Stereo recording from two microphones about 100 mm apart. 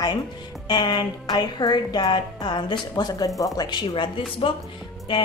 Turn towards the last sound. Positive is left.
turn(degrees=50)  # may be behind; listen again after turning